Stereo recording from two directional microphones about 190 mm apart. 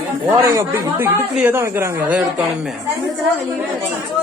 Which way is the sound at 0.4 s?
15° right (ahead or behind).